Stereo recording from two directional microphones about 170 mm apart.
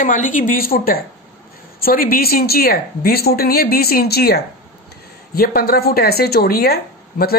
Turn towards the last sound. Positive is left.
turn(degrees=65)  # may be behind; listen again after turning